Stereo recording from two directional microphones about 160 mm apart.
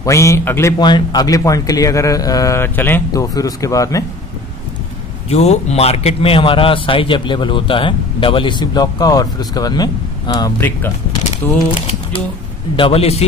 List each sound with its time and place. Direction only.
0.0 s speech: 20° left (ahead or behind)
5.3 s a man's voice: 40° left (ahead or behind); by 10.9 s 20° left (ahead or behind)
11.7 s a man's voice: 35° left (ahead or behind)